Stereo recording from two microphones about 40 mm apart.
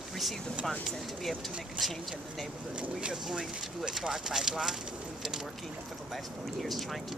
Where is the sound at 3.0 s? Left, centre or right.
Centre.